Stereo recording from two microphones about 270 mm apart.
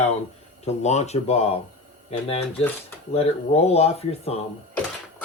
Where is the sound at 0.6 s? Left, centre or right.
Left.